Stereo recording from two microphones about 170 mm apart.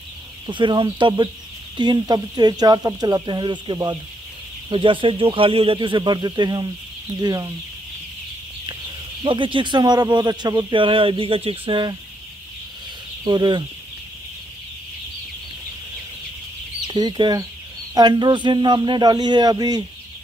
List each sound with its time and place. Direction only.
0.5 s speech: 25° right (ahead or behind)
9.2 s speech: 30° right (ahead or behind)
13.2 s speech: 25° right (ahead or behind)
16.8 s speech: 25° right (ahead or behind)